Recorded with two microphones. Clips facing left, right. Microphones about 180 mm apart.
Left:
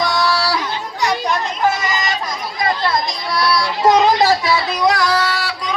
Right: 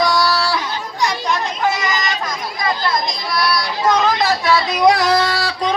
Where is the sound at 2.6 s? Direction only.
30° left (ahead or behind).